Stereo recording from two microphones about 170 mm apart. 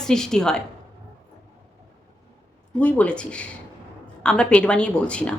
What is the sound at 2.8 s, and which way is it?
Speech, 10° left (ahead or behind).